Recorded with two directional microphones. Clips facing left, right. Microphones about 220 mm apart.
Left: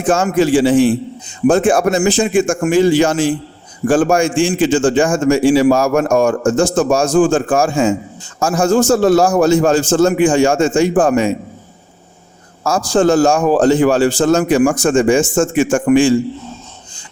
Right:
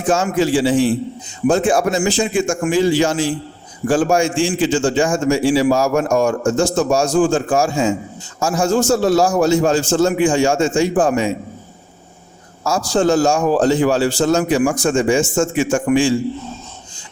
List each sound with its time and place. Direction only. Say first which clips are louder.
0.1 s a man's voice: left 3 dB; 50° left (ahead or behind)
12.6 s a man's voice: left 3 dB; 55° left (ahead or behind)